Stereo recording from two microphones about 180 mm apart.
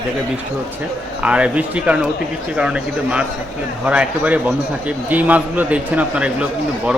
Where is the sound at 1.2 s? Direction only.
5° right (ahead or behind).